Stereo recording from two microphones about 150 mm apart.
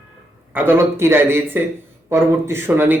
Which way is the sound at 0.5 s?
15° right (ahead or behind).